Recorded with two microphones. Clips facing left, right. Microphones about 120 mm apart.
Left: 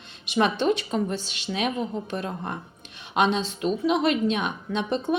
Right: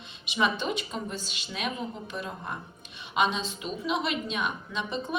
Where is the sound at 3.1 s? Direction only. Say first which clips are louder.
Left 4 dB; 50° left (ahead or behind).